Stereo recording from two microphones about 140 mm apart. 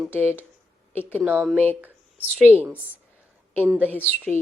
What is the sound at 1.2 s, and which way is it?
Speech, 10° right (ahead or behind).